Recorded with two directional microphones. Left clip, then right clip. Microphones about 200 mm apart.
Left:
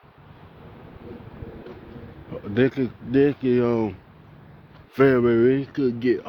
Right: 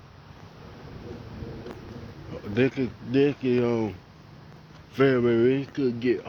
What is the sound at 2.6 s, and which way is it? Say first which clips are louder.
Speech: left 3 dB; 50° left (ahead or behind).